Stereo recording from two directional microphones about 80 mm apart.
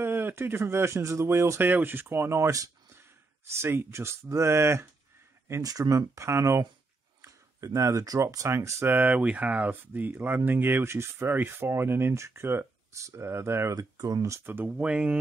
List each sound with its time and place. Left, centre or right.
0.0 s speech: right
5.6 s speech: right
8.9 s speech: centre
13.7 s speech: right
14.4 s speech: right